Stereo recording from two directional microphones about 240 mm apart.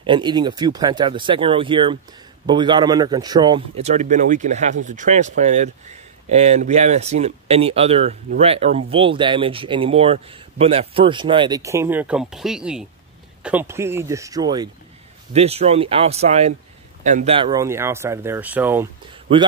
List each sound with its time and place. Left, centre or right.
0.0 s a man's voice: centre